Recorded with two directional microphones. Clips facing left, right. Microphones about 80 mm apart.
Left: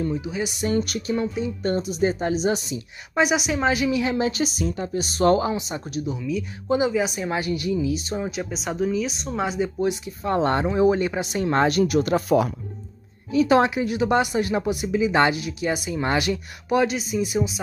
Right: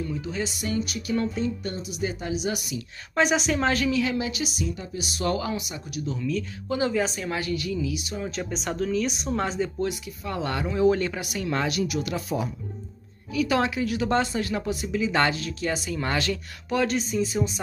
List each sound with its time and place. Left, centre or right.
0.1 s speech: centre
0.7 s speech: left
1.1 s speech: centre
1.6 s a woman's voice: left
3.2 s a woman's voice: centre; by 6.0 s left
6.0 s speech: centre
7.2 s speech: left
8.3 s speech: centre
9.0 s speech: centre; by 12.3 s left
12.3 s speech: left
13.3 s speech: left